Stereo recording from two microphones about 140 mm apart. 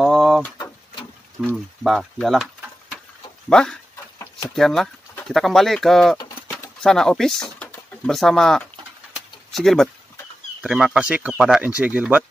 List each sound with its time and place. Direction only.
0.0 s pigeon: centre (ahead or behind)
1.4 s speech: centre (ahead or behind)